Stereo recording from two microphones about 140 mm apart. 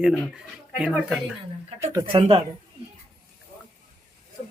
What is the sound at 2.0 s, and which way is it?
Speech, 40° right (ahead or behind).